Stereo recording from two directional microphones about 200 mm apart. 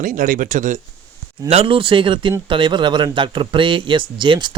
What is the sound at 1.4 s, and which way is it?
Speech, 30° right (ahead or behind).